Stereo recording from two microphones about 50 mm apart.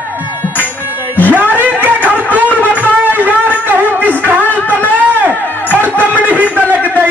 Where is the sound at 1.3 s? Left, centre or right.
Right.